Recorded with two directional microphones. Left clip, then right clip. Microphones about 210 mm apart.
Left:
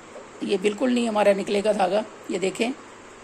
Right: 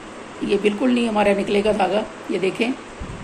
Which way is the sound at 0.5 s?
50° left (ahead or behind).